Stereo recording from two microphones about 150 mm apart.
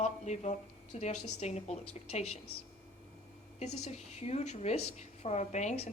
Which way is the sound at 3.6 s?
50° left (ahead or behind).